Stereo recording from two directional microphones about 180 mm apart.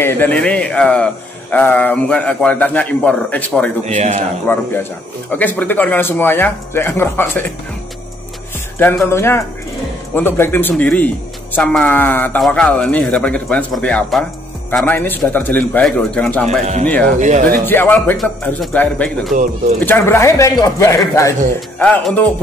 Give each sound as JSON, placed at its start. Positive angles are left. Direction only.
{"t": 0.0, "sound": "a man's voice", "side_deg": 10}
{"t": 3.8, "sound": "a man's voice", "side_deg": -40}
{"t": 5.3, "sound": "a man's voice", "side_deg": 10}
{"t": 8.7, "sound": "a man's voice", "side_deg": 10}
{"t": 17.2, "sound": "speech", "side_deg": -40}
{"t": 17.6, "sound": "a man's voice", "side_deg": 10}